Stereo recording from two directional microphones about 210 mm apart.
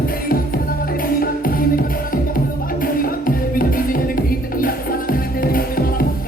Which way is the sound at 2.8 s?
45° left (ahead or behind).